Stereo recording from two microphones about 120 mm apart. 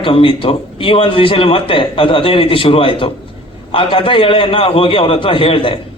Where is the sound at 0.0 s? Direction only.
45° left (ahead or behind).